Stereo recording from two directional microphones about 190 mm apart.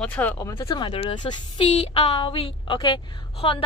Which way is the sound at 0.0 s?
5° left (ahead or behind).